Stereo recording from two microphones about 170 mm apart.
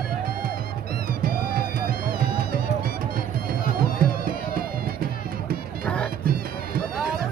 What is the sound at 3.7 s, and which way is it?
Music, 60° right (ahead or behind).